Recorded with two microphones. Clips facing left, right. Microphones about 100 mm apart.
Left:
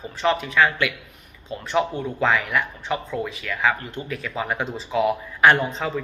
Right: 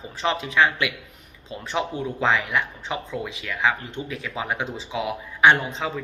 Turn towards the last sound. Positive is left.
turn(degrees=-15)  # may be behind; listen again after turning